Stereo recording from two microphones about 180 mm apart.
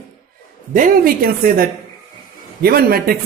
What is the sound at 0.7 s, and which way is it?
Speech, 50° right (ahead or behind).